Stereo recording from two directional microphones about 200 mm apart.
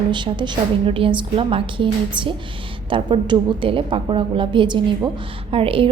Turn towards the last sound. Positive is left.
turn(degrees=-25)  # may be behind; listen again after turning